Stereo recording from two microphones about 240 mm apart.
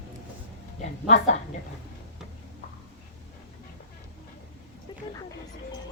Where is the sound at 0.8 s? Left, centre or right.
Left.